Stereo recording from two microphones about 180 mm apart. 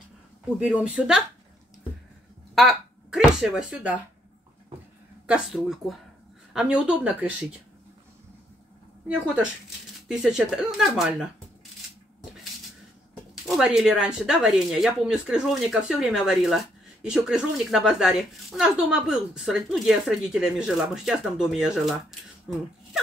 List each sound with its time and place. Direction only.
0.6 s speech: 5° right (ahead or behind)
2.5 s a sound: centre (ahead or behind)
5.2 s speech: 5° right (ahead or behind)
10.0 s speech: 5° right (ahead or behind)
13.3 s speech: 5° right (ahead or behind)